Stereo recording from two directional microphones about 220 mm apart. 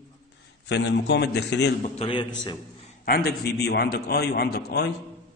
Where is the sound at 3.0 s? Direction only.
45° left (ahead or behind).